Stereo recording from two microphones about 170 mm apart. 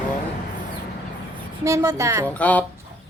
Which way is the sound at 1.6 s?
15° right (ahead or behind).